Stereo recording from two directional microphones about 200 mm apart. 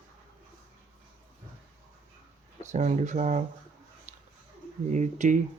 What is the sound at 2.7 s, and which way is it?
Speech, 35° right (ahead or behind).